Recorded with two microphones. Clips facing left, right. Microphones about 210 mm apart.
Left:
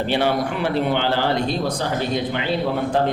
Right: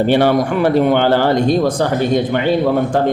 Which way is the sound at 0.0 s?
50° right (ahead or behind).